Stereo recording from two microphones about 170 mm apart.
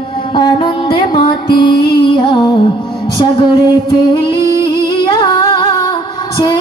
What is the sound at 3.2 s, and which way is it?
Singing, 30° left (ahead or behind).